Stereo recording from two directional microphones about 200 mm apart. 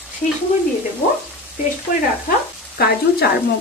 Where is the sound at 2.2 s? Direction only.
50° left (ahead or behind).